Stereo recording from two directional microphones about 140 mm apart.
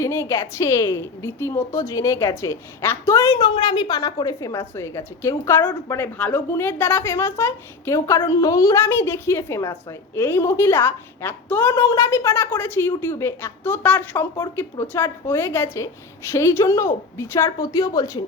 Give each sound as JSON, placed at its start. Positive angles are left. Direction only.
{"t": 0.0, "sound": "a woman's voice", "side_deg": 20}
{"t": 3.4, "sound": "a woman's voice", "side_deg": 35}